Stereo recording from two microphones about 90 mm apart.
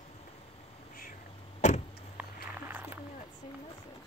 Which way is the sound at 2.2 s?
20° right (ahead or behind).